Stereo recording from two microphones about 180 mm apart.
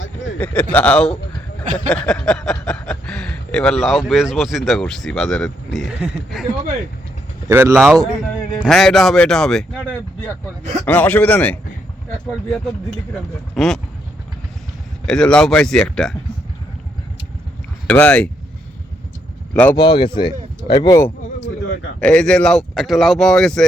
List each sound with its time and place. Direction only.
0.0 s a sound: 90° left
0.3 s a man's voice: 5° left (ahead or behind)
1.6 s a sound: 45° right (ahead or behind)
1.9 s speech: 5° left (ahead or behind); by 7.8 s 15° right (ahead or behind)
8.5 s speech: centre (ahead or behind)
10.8 s a man's voice: 10° left (ahead or behind)
15.0 s speech: 5° left (ahead or behind)
17.8 s a man's voice: 10° left (ahead or behind)
19.7 s speech: 25° left (ahead or behind)
22.0 s speech: 5° left (ahead or behind)